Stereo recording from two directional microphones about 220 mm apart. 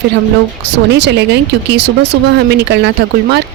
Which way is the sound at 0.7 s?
50° right (ahead or behind).